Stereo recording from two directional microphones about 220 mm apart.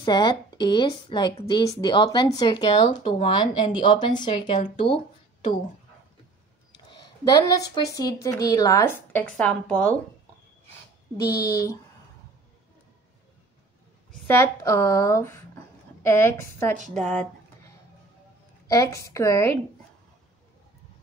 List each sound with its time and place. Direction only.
0.0 s a woman's voice: 20° left (ahead or behind)
7.2 s speech: 20° left (ahead or behind)
11.1 s speech: 15° left (ahead or behind)
14.2 s speech: 10° left (ahead or behind)
18.7 s speech: 15° left (ahead or behind)